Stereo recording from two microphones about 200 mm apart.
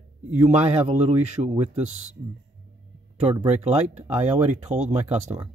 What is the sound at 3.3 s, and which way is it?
Speech, 30° right (ahead or behind).